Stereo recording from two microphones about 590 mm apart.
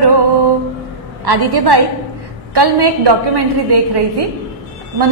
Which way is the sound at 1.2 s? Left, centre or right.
Right.